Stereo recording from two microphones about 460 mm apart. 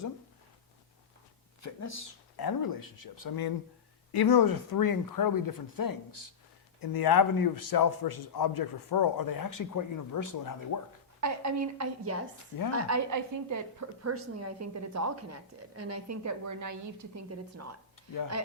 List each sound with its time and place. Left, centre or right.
1.6 s a sound: left
2.3 s a man's voice: left
11.2 s a woman's voice: right